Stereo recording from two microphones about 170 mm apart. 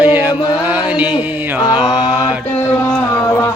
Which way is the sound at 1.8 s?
5° right (ahead or behind).